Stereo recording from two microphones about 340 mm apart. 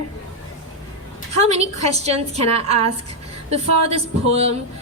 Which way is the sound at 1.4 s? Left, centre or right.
Centre.